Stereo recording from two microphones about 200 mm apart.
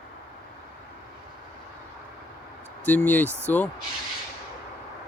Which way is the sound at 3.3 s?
10° right (ahead or behind).